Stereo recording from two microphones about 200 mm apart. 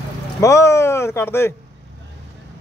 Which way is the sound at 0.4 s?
15° left (ahead or behind).